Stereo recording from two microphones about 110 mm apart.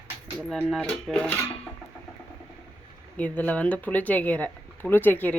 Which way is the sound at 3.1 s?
15° left (ahead or behind).